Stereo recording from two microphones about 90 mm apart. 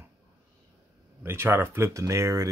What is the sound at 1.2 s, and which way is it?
Speech, 25° right (ahead or behind).